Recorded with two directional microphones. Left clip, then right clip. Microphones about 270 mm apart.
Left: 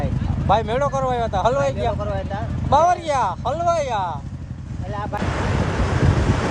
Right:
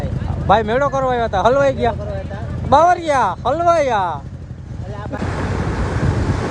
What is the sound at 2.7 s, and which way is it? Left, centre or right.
Speech, left.